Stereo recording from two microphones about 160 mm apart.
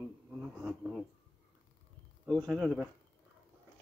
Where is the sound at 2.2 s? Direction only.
5° left (ahead or behind).